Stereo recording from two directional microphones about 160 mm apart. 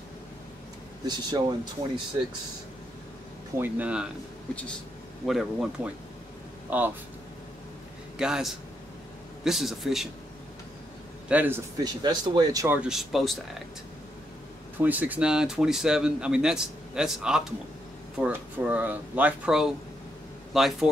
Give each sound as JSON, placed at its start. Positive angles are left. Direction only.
{"t": 1.0, "sound": "speech", "side_deg": -25}
{"t": 3.5, "sound": "speech", "side_deg": -10}
{"t": 5.2, "sound": "speech", "side_deg": 0}
{"t": 6.7, "sound": "speech", "side_deg": -10}
{"t": 8.2, "sound": "speech", "side_deg": -5}
{"t": 11.2, "sound": "speech", "side_deg": -10}
{"t": 11.8, "sound": "speech", "side_deg": -25}
{"t": 12.6, "sound": "speech", "side_deg": -10}
{"t": 14.8, "sound": "speech", "side_deg": -10}